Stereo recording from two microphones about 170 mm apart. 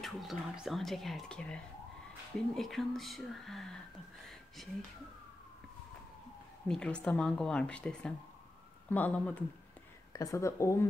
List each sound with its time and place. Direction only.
0.0 s speech: centre (ahead or behind)
6.7 s speech: 5° left (ahead or behind)
10.1 s speech: 20° left (ahead or behind)